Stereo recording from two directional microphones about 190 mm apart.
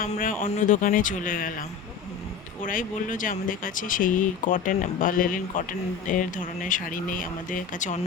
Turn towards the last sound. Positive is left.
turn(degrees=40)  # may be behind; listen again after turning